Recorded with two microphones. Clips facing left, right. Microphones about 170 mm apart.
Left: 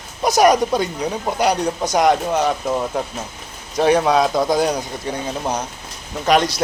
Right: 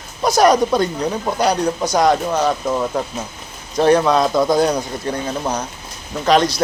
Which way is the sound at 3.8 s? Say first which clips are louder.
Right 1 dB; 15° left (ahead or behind).